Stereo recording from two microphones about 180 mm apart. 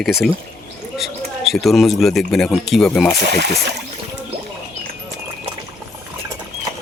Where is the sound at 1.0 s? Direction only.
Centre (ahead or behind).